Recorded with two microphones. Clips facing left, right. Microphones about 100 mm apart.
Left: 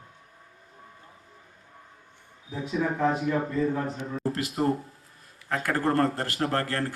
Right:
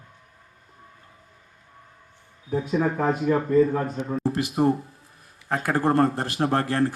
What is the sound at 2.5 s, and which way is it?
Speech, 50° right (ahead or behind).